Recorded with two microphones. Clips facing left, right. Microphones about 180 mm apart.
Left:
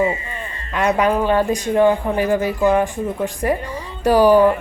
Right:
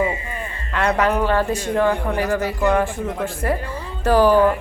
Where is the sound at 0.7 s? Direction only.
15° left (ahead or behind).